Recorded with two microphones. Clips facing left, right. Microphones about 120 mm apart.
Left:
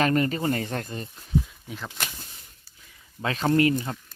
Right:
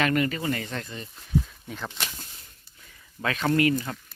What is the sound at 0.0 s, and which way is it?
Speech, 35° left (ahead or behind).